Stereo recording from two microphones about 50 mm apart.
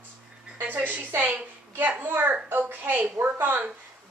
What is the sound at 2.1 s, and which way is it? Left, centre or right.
A child's voice, right.